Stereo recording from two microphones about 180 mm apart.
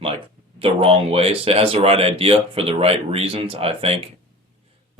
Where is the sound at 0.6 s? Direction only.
30° right (ahead or behind).